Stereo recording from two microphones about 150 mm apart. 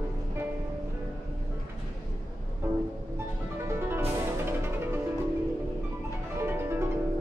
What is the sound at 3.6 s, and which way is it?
Music, 15° right (ahead or behind).